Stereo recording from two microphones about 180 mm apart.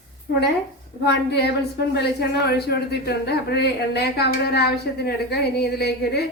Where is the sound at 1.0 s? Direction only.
65° left (ahead or behind).